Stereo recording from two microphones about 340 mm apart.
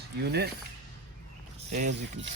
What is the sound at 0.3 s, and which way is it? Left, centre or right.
Speech, right.